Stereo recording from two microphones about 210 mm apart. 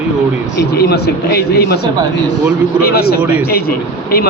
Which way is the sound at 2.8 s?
50° left (ahead or behind).